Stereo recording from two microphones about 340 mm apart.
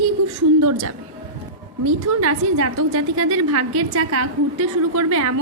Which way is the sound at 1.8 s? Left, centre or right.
Right.